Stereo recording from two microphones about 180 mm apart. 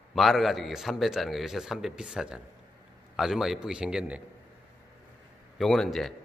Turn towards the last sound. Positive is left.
turn(degrees=0)  # may be behind; listen again after turning